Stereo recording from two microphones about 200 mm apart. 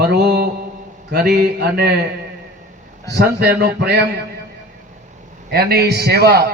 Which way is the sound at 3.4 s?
50° right (ahead or behind).